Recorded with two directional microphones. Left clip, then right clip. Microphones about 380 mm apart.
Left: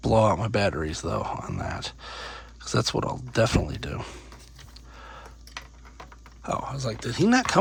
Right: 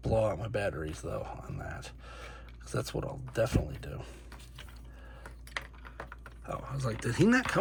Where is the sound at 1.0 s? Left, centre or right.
Left.